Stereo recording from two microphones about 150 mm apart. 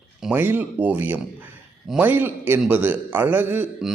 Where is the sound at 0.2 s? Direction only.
10° right (ahead or behind).